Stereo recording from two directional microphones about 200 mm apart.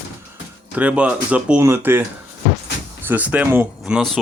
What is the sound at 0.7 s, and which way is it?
Speech, 5° right (ahead or behind).